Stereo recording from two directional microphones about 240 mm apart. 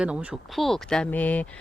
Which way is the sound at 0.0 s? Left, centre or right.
Centre.